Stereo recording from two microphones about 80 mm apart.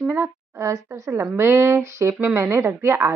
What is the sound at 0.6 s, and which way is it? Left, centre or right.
Speech, right.